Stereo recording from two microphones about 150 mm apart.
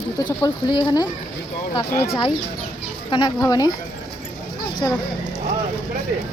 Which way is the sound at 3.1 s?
25° left (ahead or behind).